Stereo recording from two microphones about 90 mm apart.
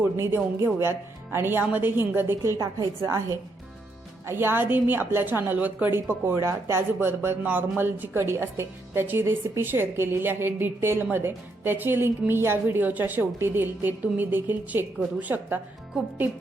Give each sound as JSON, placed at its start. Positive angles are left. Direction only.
{"t": 0.0, "sound": "a woman's voice", "side_deg": -25}